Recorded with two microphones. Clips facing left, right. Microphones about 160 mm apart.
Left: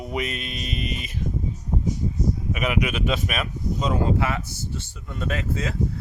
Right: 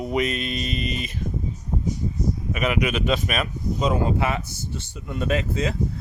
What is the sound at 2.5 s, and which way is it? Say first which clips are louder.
Speech: right 3 dB; 5° left (ahead or behind).